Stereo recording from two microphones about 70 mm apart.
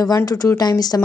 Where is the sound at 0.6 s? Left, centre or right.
Left.